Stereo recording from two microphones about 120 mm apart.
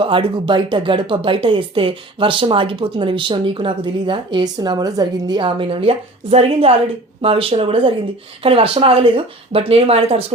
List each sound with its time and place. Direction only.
0.0 s speech: 45° right (ahead or behind)